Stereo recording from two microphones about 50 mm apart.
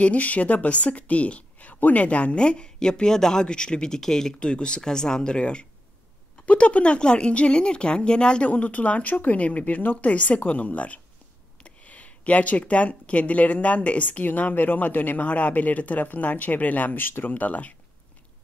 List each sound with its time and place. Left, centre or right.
0.0 s a woman's voice: left
8.5 s speech: left